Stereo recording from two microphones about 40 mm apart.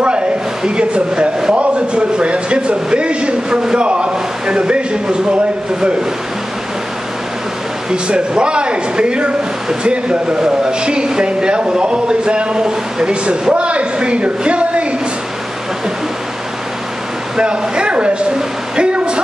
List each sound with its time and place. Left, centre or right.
0.7 s speech: right
7.9 s speech: right
17.4 s a woman's voice: right